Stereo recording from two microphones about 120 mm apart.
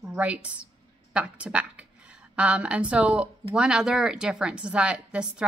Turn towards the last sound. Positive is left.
turn(degrees=-10)  # may be behind; listen again after turning